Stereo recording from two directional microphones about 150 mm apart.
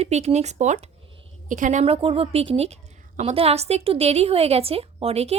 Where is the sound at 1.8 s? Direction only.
40° right (ahead or behind).